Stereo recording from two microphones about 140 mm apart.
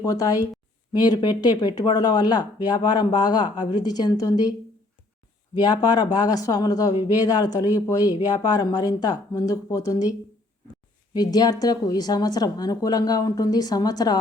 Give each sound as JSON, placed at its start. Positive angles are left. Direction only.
{"t": 0.0, "sound": "speech", "side_deg": 25}
{"t": 5.5, "sound": "speech", "side_deg": 30}